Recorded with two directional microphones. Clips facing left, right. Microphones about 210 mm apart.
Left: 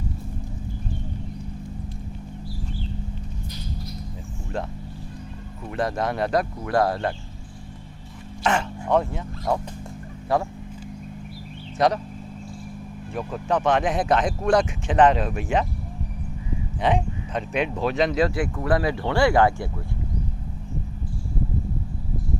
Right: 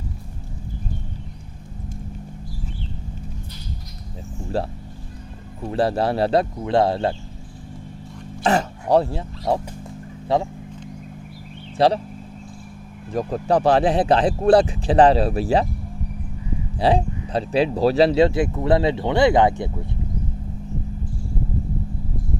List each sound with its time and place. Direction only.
4.5 s speech: 35° right (ahead or behind)
8.4 s speech: 35° right (ahead or behind)
11.8 s speech: 30° right (ahead or behind)
13.1 s speech: 35° right (ahead or behind)
16.8 s speech: 35° right (ahead or behind)